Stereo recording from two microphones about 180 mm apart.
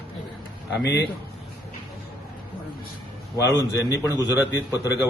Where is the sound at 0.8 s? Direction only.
75° left (ahead or behind).